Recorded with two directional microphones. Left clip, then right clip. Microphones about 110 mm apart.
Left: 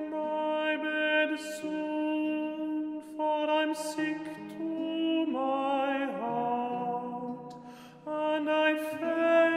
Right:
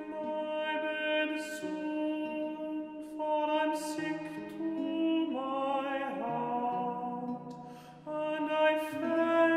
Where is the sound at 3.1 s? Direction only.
35° left (ahead or behind).